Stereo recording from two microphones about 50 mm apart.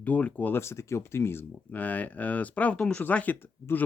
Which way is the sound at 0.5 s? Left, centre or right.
Left.